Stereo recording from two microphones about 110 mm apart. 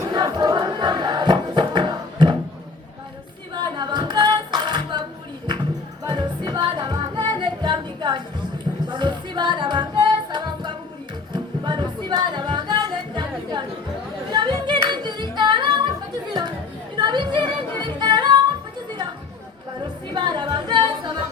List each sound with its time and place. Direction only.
0.1 s battle cry: 40° right (ahead or behind)
3.5 s music: 45° right (ahead or behind)
6.1 s music: 40° right (ahead or behind)
17.0 s music: 45° right (ahead or behind)
19.8 s music: 40° right (ahead or behind)